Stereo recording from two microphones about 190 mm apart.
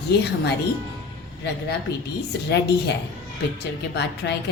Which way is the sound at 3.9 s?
65° left (ahead or behind).